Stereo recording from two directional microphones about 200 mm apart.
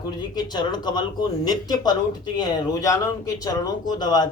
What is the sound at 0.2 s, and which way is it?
Speech, 20° left (ahead or behind).